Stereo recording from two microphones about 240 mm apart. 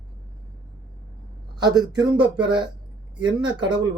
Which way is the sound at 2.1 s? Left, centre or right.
Centre.